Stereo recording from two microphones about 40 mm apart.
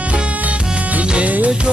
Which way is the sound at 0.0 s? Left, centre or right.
Right.